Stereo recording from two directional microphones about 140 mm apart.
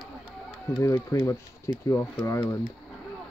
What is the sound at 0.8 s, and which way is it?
Speech, 25° left (ahead or behind).